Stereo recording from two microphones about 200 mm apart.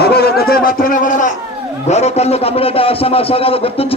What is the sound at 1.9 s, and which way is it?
A man's voice, 35° left (ahead or behind).